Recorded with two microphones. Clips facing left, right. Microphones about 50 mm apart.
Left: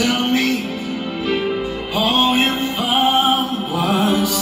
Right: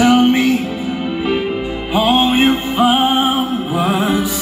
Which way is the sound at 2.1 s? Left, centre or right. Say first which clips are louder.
Right 4 dB; right.